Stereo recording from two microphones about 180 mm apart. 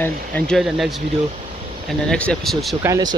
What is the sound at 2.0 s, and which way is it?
Speech, 5° left (ahead or behind).